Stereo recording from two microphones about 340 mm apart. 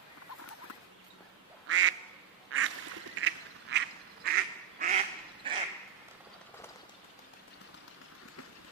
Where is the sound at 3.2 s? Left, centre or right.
Right.